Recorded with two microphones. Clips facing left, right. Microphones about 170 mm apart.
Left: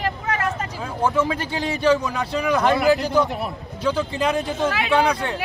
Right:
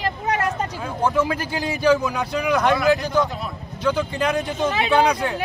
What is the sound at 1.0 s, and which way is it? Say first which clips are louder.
Speech: even; 5° right (ahead or behind).